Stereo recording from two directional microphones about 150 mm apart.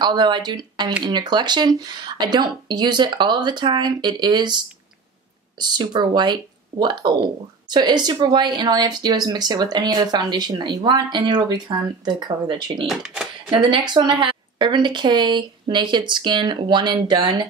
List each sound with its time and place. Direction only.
0.0 s speech: 30° right (ahead or behind)
12.8 s speech: 5° right (ahead or behind)
13.5 s speech: 35° right (ahead or behind)